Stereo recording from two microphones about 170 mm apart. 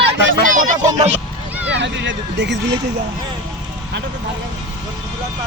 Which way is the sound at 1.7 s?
90° right.